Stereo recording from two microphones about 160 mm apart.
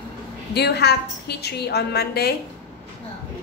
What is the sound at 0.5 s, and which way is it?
A woman's voice, 90° left.